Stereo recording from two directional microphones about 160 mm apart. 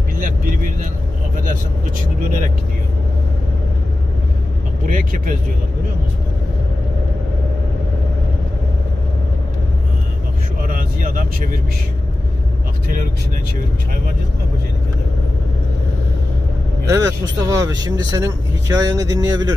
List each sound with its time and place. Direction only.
1.3 s vehicle: 55° right (ahead or behind)
4.8 s speech: 55° right (ahead or behind)
10.6 s vehicle: 60° right (ahead or behind)
16.8 s speech: 20° right (ahead or behind)